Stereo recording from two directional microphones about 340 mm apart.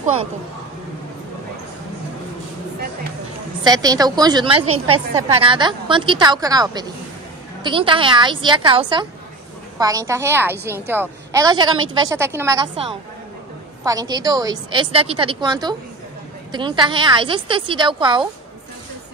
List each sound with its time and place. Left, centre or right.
0.0 s a woman's voice: centre
3.6 s a woman's voice: centre
4.6 s a woman's voice: right
5.3 s a woman's voice: centre